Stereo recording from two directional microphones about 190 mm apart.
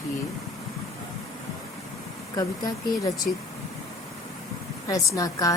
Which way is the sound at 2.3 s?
20° left (ahead or behind).